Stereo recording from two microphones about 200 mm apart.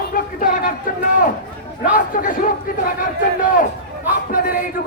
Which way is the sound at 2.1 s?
45° left (ahead or behind).